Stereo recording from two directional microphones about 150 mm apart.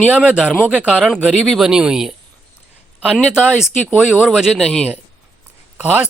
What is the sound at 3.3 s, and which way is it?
Speech, 5° right (ahead or behind).